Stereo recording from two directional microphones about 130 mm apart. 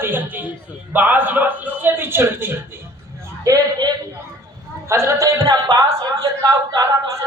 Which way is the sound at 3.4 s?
30° right (ahead or behind).